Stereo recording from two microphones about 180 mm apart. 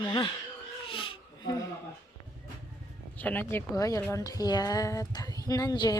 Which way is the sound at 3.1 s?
10° left (ahead or behind).